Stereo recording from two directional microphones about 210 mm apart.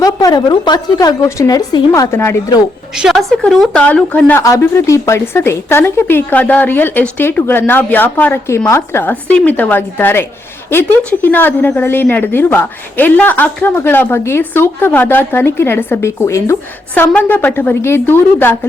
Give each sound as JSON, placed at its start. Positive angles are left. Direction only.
{"t": 0.0, "sound": "a woman's voice", "side_deg": 20}
{"t": 2.9, "sound": "a woman's voice", "side_deg": 0}